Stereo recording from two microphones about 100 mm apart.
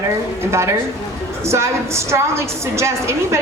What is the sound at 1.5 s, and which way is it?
A woman's voice, 30° right (ahead or behind).